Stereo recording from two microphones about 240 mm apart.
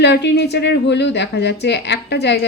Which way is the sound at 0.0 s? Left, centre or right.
Left.